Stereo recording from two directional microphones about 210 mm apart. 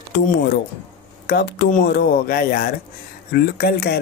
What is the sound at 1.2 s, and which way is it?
Speech, 50° left (ahead or behind).